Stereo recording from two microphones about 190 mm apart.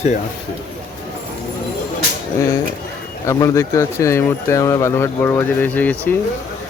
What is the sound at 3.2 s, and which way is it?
Speech, 15° left (ahead or behind).